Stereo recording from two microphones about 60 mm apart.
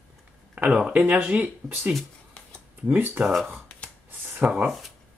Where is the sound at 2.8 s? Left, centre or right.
Right.